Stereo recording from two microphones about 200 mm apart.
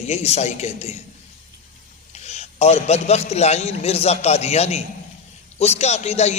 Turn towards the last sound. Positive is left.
turn(degrees=35)  # may be behind; listen again after turning